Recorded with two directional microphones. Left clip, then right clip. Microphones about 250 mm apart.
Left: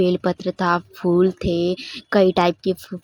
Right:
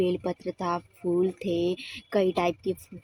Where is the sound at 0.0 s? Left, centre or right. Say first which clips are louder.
Left 8 dB; left.